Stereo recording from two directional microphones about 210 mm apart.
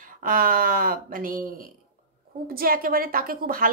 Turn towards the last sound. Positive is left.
turn(degrees=-40)  # may be behind; listen again after turning